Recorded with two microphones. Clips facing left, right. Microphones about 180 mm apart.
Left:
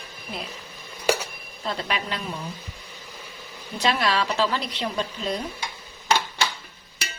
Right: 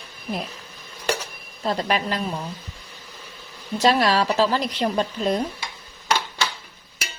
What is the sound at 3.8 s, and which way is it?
A woman's voice, 40° right (ahead or behind).